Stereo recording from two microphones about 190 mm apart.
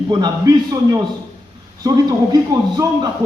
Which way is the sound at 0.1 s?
20° right (ahead or behind).